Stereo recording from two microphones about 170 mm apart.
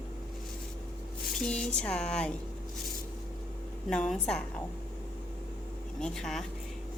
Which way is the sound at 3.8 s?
5° left (ahead or behind).